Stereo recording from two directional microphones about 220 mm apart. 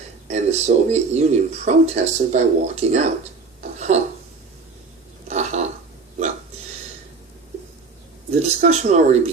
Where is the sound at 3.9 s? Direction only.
30° right (ahead or behind).